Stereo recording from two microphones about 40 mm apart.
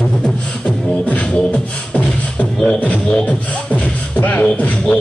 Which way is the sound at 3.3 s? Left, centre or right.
Left.